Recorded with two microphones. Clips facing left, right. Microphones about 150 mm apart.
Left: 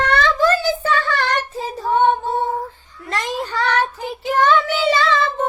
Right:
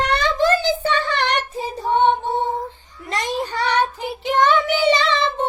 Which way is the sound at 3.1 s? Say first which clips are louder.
Even; 15° right (ahead or behind).